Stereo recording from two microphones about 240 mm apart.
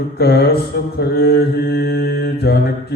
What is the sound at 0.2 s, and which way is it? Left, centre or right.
Mantra, left.